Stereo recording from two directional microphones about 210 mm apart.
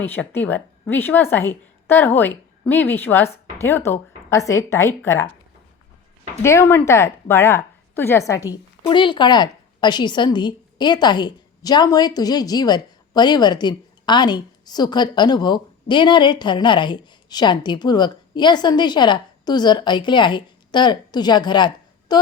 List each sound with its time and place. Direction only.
0.0 s a woman's voice: 10° left (ahead or behind)
6.4 s a woman's voice: 10° left (ahead or behind)